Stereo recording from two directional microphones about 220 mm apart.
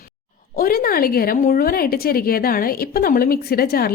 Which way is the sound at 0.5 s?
40° left (ahead or behind).